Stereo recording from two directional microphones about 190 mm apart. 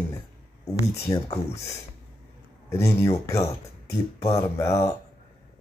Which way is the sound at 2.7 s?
15° left (ahead or behind).